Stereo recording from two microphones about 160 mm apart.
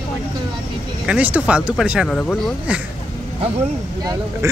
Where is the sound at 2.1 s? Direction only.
5° left (ahead or behind).